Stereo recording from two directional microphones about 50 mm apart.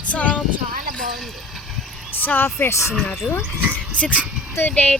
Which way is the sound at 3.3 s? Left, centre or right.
Left.